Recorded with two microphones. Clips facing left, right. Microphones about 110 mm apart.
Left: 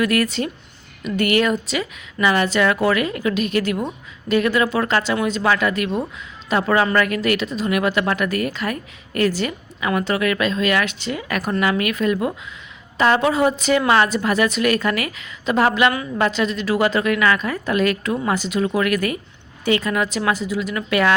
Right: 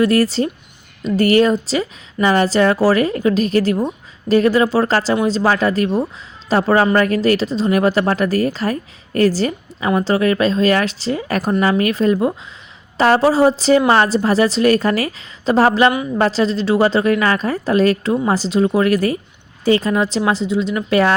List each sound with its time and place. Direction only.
0.0 s a woman's voice: 30° right (ahead or behind)